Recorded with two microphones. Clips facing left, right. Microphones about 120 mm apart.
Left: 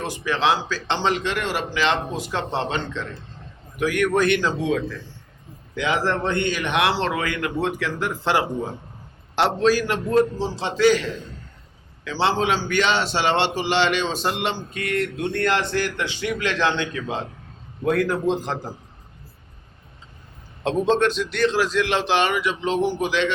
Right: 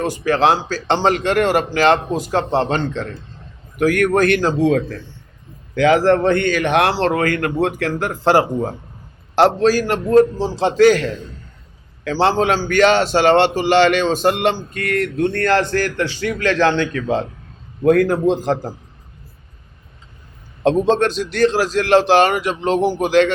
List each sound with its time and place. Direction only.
0.0 s a man's voice: 45° right (ahead or behind)
17.8 s a man's voice: 45° right (ahead or behind)
20.7 s a man's voice: 35° right (ahead or behind)